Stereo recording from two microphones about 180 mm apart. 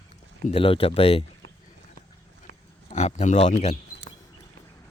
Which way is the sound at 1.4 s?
90° right.